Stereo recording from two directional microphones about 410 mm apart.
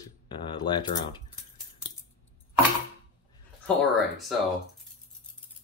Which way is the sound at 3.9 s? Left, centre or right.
Centre.